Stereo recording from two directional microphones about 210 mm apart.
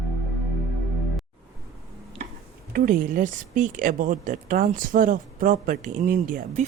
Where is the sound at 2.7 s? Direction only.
40° right (ahead or behind).